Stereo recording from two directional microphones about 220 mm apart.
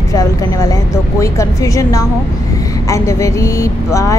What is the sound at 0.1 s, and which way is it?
Speech, 15° left (ahead or behind).